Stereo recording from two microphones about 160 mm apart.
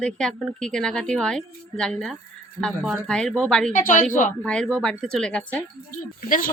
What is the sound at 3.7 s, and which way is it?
Speech, 55° left (ahead or behind).